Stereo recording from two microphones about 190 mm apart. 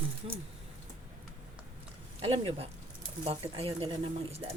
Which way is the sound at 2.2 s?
30° right (ahead or behind).